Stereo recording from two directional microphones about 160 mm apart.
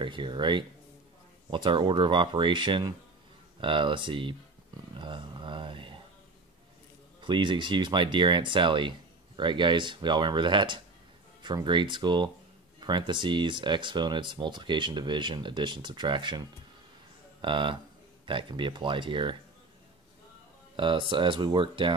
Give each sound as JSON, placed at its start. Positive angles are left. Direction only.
{"t": 0.0, "sound": "speech", "side_deg": -30}
{"t": 4.9, "sound": "a sound", "side_deg": -30}
{"t": 7.2, "sound": "speech", "side_deg": -30}
{"t": 20.7, "sound": "speech", "side_deg": -30}